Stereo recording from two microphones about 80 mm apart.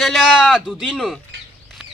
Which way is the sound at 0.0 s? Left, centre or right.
Centre.